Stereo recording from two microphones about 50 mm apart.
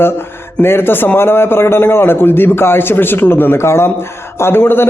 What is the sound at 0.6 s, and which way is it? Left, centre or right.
A man's voice, left.